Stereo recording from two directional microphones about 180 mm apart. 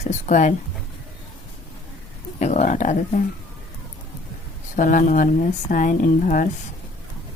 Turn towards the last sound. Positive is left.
turn(degrees=50)  # may be behind; listen again after turning